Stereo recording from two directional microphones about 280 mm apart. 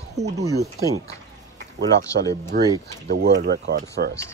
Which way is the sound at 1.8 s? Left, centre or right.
Centre.